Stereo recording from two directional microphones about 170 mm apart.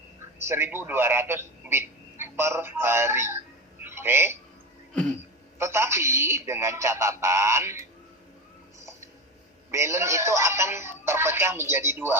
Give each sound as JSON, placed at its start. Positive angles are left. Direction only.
{"t": 0.3, "sound": "a man's voice", "side_deg": -15}
{"t": 5.5, "sound": "speech", "side_deg": -15}
{"t": 8.8, "sound": "a sound", "side_deg": -15}
{"t": 9.7, "sound": "speech", "side_deg": -15}